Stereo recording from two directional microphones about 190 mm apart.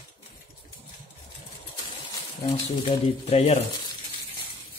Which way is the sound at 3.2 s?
30° left (ahead or behind).